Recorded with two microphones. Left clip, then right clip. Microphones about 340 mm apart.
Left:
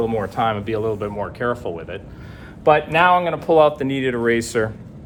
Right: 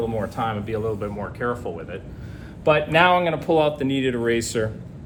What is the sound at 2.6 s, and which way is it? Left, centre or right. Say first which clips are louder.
Speech: left 3 dB; centre.